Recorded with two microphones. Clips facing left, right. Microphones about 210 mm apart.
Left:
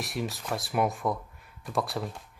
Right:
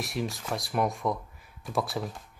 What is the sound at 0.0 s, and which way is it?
Speech, centre (ahead or behind).